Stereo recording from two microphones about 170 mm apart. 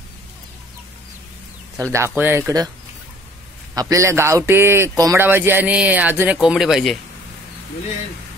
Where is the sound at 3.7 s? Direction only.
20° right (ahead or behind); by 6.9 s centre (ahead or behind).